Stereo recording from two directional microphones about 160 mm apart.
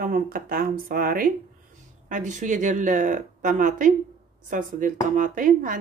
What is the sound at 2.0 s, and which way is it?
Speech, 50° right (ahead or behind).